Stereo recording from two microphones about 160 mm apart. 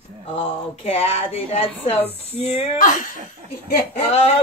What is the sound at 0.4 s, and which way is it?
A woman's voice, 35° left (ahead or behind).